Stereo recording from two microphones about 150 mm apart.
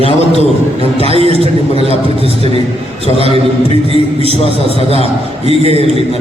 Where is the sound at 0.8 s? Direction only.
40° right (ahead or behind).